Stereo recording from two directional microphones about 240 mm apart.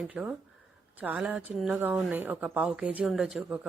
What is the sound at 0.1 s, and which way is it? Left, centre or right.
A woman's voice, centre.